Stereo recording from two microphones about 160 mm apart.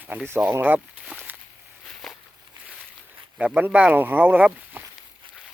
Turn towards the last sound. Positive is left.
turn(degrees=-10)  # may be behind; listen again after turning